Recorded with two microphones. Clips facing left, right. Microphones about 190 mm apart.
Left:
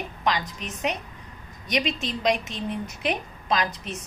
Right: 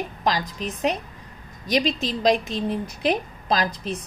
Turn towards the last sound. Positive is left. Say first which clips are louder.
# right 2 dB
turn(degrees=-35)  # may be behind; listen again after turning